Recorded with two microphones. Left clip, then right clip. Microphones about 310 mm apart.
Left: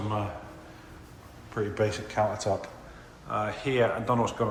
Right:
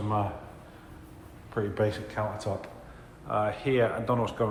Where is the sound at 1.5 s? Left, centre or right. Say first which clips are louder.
Even; centre.